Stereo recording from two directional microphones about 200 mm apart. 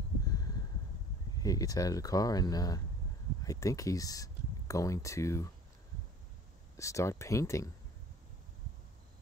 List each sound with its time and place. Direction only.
1.3 s speech: 20° left (ahead or behind)
6.8 s speech: 15° left (ahead or behind)